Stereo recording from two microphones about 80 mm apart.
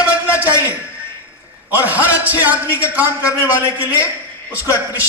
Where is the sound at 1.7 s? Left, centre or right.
Right.